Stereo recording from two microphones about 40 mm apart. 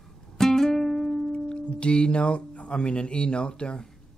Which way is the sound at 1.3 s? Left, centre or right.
Left.